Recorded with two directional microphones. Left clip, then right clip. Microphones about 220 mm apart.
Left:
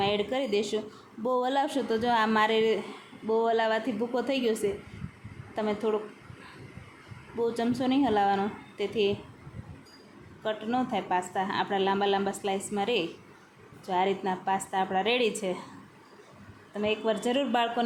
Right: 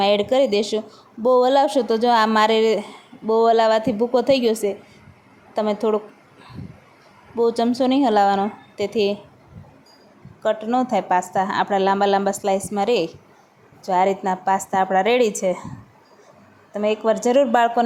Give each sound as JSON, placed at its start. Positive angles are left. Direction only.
{"t": 0.0, "sound": "a woman's voice", "side_deg": -35}
{"t": 7.3, "sound": "a woman's voice", "side_deg": -30}
{"t": 10.4, "sound": "a woman's voice", "side_deg": -30}
{"t": 16.7, "sound": "a woman's voice", "side_deg": -25}